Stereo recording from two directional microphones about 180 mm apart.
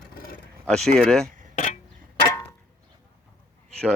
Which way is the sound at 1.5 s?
40° left (ahead or behind).